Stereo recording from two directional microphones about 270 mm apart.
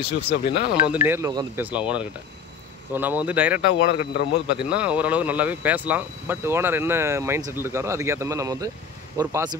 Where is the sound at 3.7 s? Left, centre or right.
Left.